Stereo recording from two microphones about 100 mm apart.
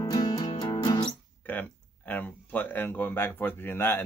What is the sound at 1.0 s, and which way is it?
Guitar, 15° left (ahead or behind).